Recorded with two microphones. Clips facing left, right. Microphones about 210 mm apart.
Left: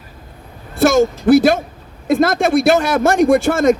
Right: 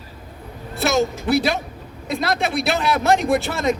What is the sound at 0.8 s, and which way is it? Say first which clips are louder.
Speech: left 7 dB; 50° left (ahead or behind).